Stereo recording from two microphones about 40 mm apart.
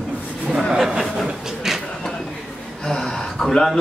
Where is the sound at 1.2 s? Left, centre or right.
Centre.